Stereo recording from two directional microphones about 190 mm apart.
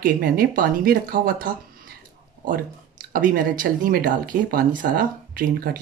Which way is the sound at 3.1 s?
50° right (ahead or behind).